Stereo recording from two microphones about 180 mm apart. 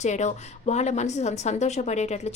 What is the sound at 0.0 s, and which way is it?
A woman's voice, 40° left (ahead or behind).